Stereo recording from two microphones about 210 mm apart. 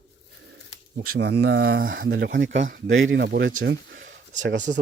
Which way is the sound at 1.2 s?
50° right (ahead or behind).